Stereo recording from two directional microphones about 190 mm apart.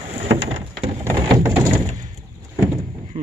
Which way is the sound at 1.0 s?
15° right (ahead or behind).